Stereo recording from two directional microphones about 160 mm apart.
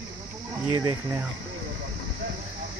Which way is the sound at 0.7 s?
15° right (ahead or behind).